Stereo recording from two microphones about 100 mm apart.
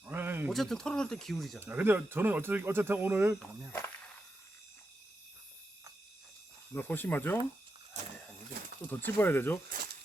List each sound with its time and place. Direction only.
0.0 s a sound: 20° right (ahead or behind)
0.5 s speech: 5° left (ahead or behind)
1.5 s speech: 20° right (ahead or behind)
6.7 s speech: 20° left (ahead or behind)
8.9 s speech: 20° left (ahead or behind)